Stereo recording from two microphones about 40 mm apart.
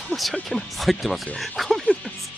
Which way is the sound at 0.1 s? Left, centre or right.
Centre.